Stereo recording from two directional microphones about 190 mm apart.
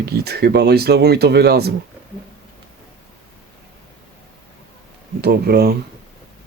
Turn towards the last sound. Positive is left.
turn(degrees=-55)  # may be behind; listen again after turning